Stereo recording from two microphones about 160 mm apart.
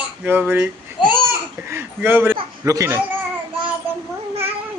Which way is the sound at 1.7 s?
15° right (ahead or behind).